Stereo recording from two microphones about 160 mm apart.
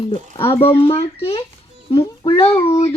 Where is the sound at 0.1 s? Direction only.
35° left (ahead or behind).